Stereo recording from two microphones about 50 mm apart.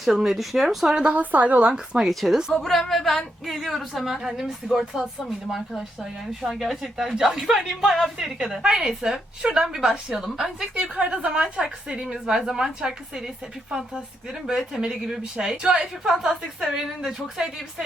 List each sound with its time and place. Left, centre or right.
0.0 s speech: centre
1.1 s a woman's voice: right
1.7 s a woman's voice: centre
2.0 s a woman's voice: centre
8.6 s a woman's voice: centre
10.8 s a woman's voice: right
14.8 s a woman's voice: centre